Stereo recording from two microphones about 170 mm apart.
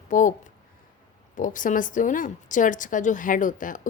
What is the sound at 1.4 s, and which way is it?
A woman's voice, 50° left (ahead or behind).